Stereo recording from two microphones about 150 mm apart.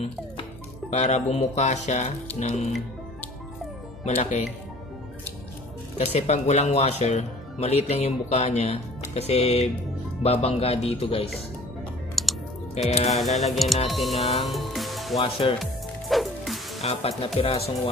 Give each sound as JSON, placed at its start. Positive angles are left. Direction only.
{"t": 0.0, "sound": "speech", "side_deg": 45}
{"t": 4.0, "sound": "speech", "side_deg": 50}
{"t": 5.9, "sound": "speech", "side_deg": 50}
{"t": 12.2, "sound": "typing", "side_deg": 0}
{"t": 12.7, "sound": "speech", "side_deg": 45}
{"t": 13.5, "sound": "music", "side_deg": 0}
{"t": 15.1, "sound": "speech", "side_deg": 35}
{"t": 15.6, "sound": "music", "side_deg": 0}
{"t": 16.8, "sound": "speech", "side_deg": 40}